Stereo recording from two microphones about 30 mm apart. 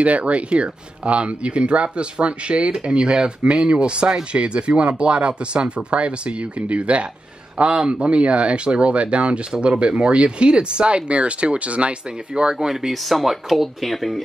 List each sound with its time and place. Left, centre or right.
0.0 s speech: right
7.7 s speech: right
12.4 s speech: right
12.9 s speech: centre